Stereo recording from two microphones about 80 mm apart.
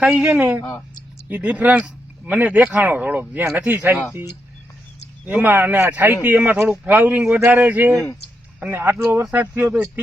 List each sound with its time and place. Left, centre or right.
0.0 s a woman's voice: centre
5.2 s speech: right